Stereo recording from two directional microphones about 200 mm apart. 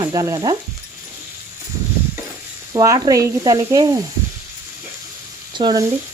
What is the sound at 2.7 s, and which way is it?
Speech, 20° right (ahead or behind).